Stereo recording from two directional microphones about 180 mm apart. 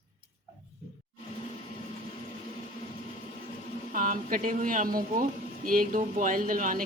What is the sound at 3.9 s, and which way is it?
Speech, 50° right (ahead or behind).